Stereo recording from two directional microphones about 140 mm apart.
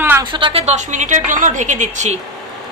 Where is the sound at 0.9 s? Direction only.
60° right (ahead or behind).